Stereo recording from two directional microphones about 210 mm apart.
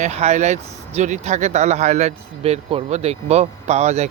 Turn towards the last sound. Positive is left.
turn(degrees=-30)  # may be behind; listen again after turning